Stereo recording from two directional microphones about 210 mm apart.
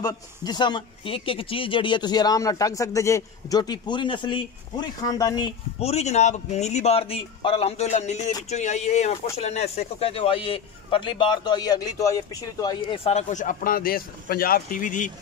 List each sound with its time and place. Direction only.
0.0 s speech: 20° left (ahead or behind)
5.8 s speech: 30° left (ahead or behind)